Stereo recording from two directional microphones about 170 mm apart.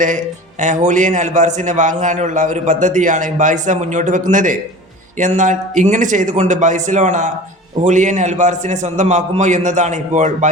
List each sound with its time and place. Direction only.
0.6 s a man's voice: 45° right (ahead or behind)